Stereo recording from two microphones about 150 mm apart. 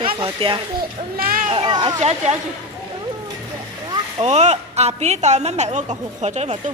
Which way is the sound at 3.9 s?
45° right (ahead or behind).